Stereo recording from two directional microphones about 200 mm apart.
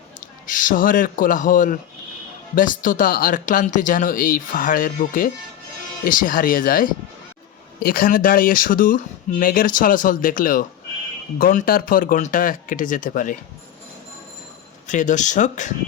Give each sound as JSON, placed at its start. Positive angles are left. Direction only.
{"t": 0.4, "sound": "speech", "side_deg": 40}
{"t": 14.8, "sound": "speech", "side_deg": 40}